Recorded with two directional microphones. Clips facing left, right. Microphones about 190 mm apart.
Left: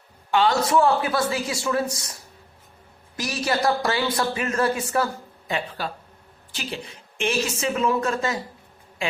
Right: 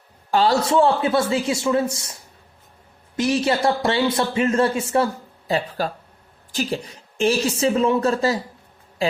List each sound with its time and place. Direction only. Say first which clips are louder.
0.3 s a man's voice: right 2 dB; 35° right (ahead or behind)
3.2 s a man's voice: right 5 dB; 25° right (ahead or behind)
5.5 s a woman's voice: right 5 dB; 40° right (ahead or behind)